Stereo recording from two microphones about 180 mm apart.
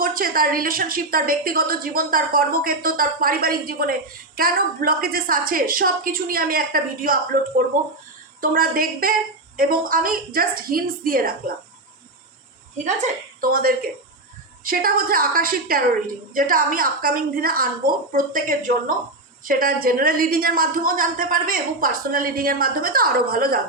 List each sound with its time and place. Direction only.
0.0 s a woman's voice: 50° right (ahead or behind)
8.4 s a woman's voice: 50° right (ahead or behind)
12.7 s a woman's voice: 45° right (ahead or behind)